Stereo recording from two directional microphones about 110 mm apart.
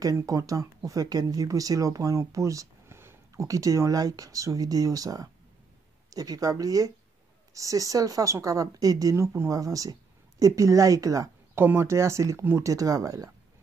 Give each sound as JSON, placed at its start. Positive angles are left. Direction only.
{"t": 0.0, "sound": "speech", "side_deg": -30}
{"t": 11.5, "sound": "speech", "side_deg": -20}